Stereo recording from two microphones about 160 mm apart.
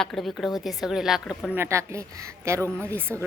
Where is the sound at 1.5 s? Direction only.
20° right (ahead or behind).